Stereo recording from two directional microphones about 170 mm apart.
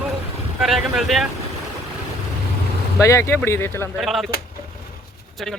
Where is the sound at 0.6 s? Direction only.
Centre (ahead or behind).